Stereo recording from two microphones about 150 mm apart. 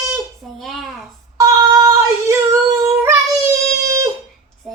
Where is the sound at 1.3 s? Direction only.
25° right (ahead or behind).